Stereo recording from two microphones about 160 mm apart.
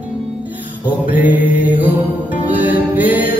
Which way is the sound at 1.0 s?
10° right (ahead or behind).